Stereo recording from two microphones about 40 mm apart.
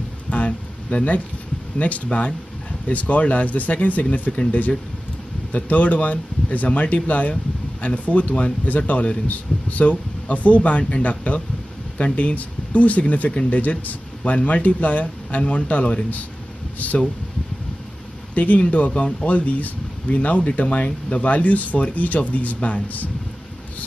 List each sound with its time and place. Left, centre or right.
0.3 s a sound: left
1.8 s speech: left
18.3 s speech: left